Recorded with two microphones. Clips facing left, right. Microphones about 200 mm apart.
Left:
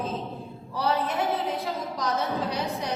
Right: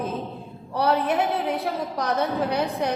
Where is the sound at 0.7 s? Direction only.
60° right (ahead or behind).